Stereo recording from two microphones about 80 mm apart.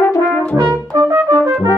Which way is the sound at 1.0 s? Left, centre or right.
Right.